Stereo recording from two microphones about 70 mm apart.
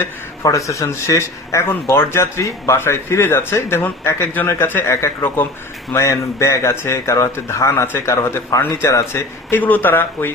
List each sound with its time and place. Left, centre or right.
0.4 s speech: left
5.9 s speech: left